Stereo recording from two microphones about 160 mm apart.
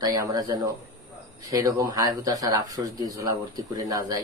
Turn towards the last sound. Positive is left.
turn(degrees=-25)  # may be behind; listen again after turning